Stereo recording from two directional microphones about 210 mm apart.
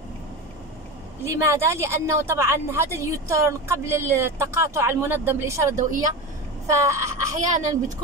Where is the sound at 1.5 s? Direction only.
15° right (ahead or behind).